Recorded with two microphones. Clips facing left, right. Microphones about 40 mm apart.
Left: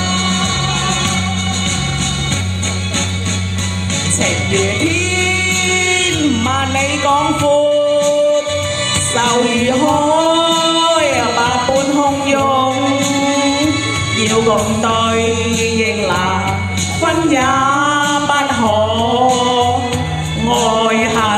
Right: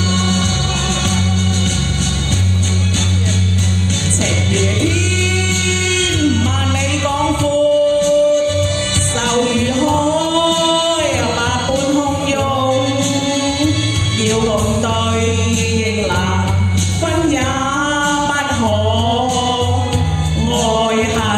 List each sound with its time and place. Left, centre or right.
7.1 s music: left
9.2 s chant: left
12.5 s music: left
17.0 s music: left
18.7 s a sound: left
19.2 s music: left